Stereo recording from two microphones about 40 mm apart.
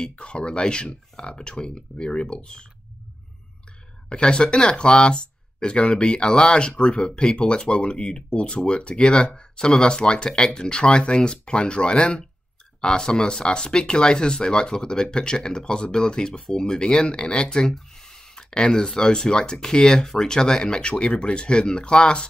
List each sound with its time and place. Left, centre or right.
0.1 s speech: left
4.1 s speech: left